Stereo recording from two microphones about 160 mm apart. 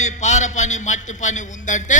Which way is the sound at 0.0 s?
45° left (ahead or behind).